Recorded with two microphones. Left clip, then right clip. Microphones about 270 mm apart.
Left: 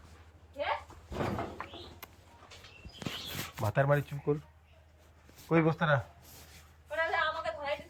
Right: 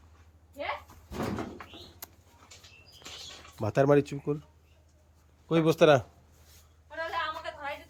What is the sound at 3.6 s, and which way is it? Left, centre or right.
Speech, right.